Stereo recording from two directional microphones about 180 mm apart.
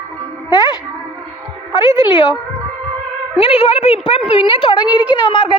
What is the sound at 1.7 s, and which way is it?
Speech, 25° left (ahead or behind).